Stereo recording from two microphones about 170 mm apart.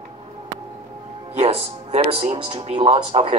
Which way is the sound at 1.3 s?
35° right (ahead or behind).